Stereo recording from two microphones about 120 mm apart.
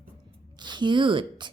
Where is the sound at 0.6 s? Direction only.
40° right (ahead or behind).